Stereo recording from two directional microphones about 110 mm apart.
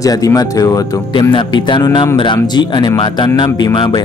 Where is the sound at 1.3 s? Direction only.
45° left (ahead or behind).